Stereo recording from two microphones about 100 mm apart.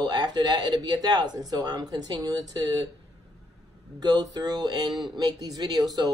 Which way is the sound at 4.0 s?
40° right (ahead or behind).